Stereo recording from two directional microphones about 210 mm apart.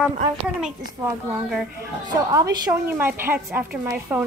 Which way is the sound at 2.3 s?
15° right (ahead or behind).